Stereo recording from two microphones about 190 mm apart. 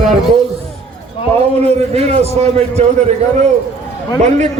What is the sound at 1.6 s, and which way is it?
A man's voice, 35° right (ahead or behind).